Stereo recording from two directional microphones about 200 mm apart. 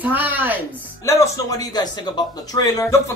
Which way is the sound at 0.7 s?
15° left (ahead or behind).